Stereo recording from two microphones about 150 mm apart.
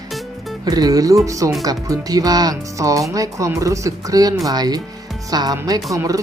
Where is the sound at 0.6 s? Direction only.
25° right (ahead or behind).